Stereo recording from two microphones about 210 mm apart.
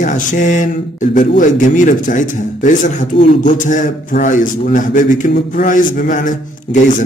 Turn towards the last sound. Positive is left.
turn(degrees=40)  # may be behind; listen again after turning